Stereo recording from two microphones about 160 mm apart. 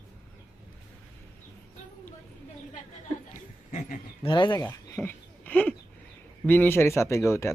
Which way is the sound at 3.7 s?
60° left (ahead or behind).